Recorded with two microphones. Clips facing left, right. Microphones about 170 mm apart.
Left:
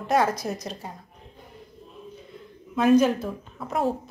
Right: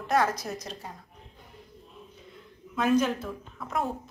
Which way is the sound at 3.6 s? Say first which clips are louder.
Left 5 dB; 30° left (ahead or behind).